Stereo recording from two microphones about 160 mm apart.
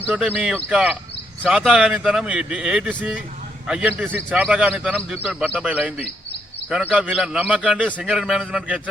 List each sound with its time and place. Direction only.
0.1 s a man's voice: 10° right (ahead or behind)